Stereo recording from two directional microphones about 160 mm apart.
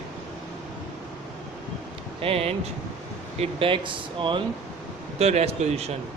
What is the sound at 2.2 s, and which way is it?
Speech, 40° right (ahead or behind).